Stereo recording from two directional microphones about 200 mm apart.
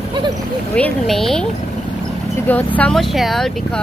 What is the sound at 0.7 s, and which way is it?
Speech, 5° left (ahead or behind).